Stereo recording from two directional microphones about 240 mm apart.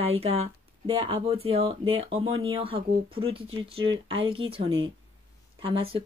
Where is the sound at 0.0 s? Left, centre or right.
Right.